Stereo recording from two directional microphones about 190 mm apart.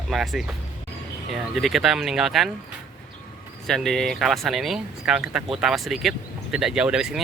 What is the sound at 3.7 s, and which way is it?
Speech, centre (ahead or behind).